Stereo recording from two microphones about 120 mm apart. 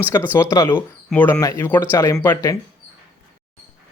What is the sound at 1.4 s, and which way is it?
Speech, 30° left (ahead or behind).